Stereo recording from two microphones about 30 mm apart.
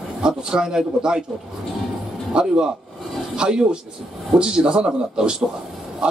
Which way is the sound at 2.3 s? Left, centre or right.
Right.